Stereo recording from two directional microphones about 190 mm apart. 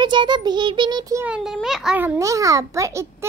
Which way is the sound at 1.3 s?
Centre (ahead or behind).